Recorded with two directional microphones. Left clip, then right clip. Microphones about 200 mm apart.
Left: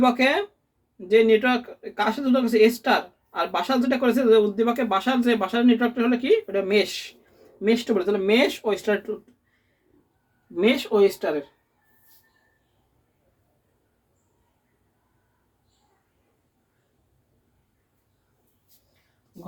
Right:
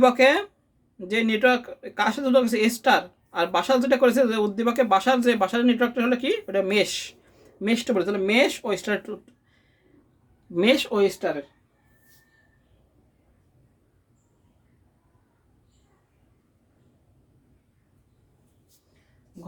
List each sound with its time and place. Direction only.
0.0 s speech: 45° right (ahead or behind)
10.5 s speech: 45° right (ahead or behind)